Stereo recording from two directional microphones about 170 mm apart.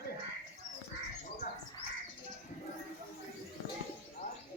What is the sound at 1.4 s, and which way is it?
Bird, 60° left (ahead or behind).